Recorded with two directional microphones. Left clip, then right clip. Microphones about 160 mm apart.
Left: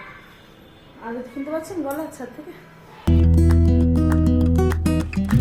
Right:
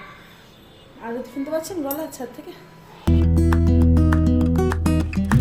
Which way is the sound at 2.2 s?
10° right (ahead or behind).